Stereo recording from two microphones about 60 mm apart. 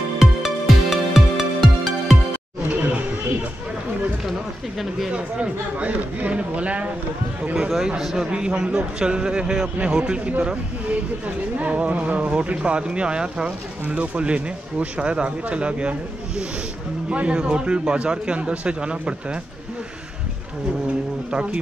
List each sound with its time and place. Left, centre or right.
0.2 s music: centre
5.1 s speech: right
7.5 s a man's voice: centre
21.3 s a man's voice: centre